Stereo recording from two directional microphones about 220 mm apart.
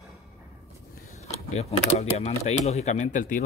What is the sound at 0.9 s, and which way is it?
Speech, 30° left (ahead or behind).